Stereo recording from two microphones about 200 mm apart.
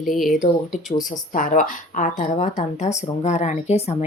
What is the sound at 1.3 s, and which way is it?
A woman's voice, 40° left (ahead or behind).